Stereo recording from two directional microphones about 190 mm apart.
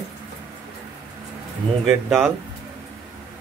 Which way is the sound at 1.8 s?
Centre (ahead or behind).